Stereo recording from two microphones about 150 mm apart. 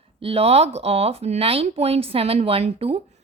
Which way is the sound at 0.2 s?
40° right (ahead or behind).